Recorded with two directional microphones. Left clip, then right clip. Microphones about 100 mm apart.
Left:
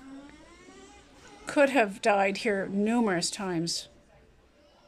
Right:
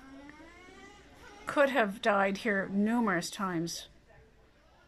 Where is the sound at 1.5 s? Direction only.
15° left (ahead or behind).